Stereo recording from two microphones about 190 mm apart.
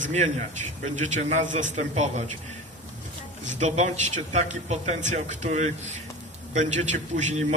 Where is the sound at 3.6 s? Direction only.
40° right (ahead or behind).